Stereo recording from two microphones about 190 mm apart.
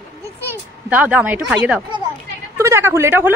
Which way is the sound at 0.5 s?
10° right (ahead or behind).